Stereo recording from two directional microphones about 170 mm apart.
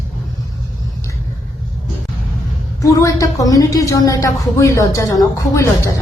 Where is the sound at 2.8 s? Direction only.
20° left (ahead or behind).